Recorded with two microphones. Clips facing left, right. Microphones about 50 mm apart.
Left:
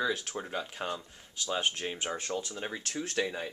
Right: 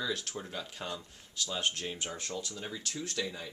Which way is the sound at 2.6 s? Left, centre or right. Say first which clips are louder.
Left 3 dB; left.